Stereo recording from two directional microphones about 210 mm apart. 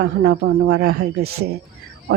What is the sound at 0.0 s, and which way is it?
A woman's voice, 50° right (ahead or behind).